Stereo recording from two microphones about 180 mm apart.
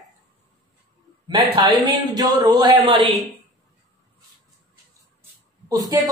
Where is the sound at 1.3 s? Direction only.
25° right (ahead or behind).